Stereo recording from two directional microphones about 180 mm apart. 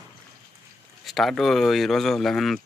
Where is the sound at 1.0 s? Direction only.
Centre (ahead or behind).